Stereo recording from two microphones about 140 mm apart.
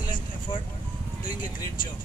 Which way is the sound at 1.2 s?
75° left (ahead or behind).